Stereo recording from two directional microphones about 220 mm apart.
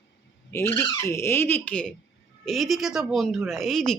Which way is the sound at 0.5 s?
10° left (ahead or behind).